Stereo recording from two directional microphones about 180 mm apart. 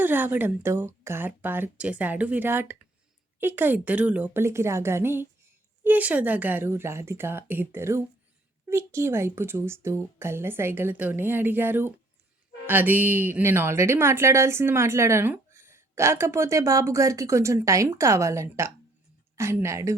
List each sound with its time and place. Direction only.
0.0 s a woman's voice: 10° right (ahead or behind)